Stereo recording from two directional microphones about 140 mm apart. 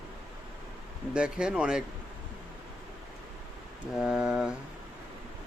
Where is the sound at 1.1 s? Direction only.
5° right (ahead or behind).